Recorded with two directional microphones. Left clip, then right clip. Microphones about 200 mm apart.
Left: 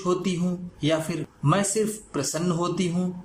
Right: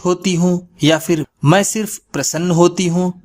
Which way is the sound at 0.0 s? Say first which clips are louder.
Right 9 dB; 55° right (ahead or behind).